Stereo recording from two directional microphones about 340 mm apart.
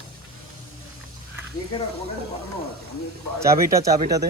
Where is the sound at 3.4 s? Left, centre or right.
Centre.